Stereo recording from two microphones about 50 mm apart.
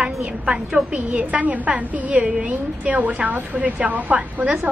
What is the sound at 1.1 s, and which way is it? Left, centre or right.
A woman's voice, right.